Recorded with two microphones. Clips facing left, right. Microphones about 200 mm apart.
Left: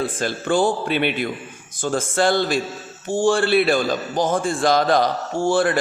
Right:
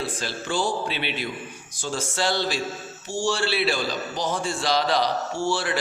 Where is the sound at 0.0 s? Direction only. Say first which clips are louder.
Left 6 dB; 50° left (ahead or behind).